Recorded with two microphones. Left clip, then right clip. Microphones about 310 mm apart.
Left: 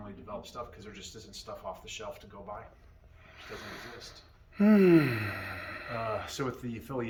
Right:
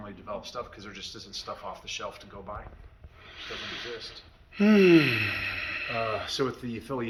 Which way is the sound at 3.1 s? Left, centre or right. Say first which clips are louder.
Right 6 dB; centre.